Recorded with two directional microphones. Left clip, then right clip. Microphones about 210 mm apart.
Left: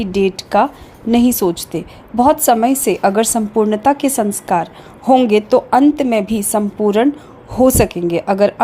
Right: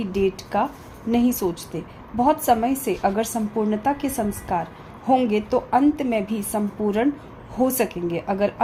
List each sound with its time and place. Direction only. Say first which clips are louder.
0.0 s a woman's voice: left 7 dB; 35° left (ahead or behind)